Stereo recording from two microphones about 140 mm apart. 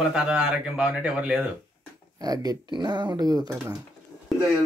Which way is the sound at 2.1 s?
25° right (ahead or behind).